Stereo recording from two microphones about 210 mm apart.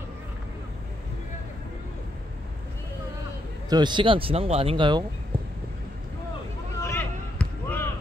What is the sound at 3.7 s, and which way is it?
Speech, 20° right (ahead or behind).